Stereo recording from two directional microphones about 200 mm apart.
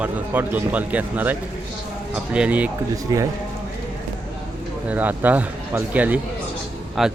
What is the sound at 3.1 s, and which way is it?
Speech, 15° right (ahead or behind).